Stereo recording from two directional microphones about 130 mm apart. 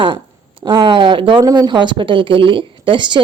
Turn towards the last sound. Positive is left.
turn(degrees=-35)  # may be behind; listen again after turning